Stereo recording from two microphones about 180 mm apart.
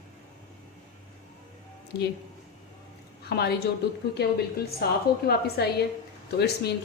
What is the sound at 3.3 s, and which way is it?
A woman's voice, 60° left (ahead or behind).